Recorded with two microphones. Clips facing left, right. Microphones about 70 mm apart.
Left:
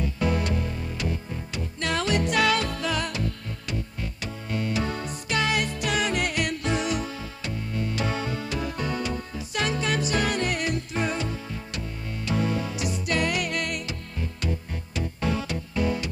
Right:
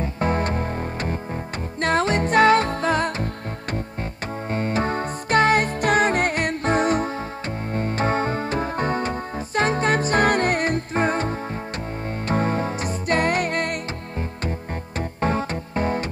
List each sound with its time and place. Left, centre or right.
0.0 s music: right
4.5 s music: right
15.0 s music: right